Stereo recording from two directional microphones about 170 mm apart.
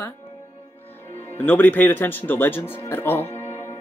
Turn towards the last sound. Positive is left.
turn(degrees=15)  # may be behind; listen again after turning